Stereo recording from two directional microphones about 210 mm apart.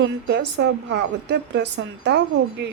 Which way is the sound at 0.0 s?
55° right (ahead or behind).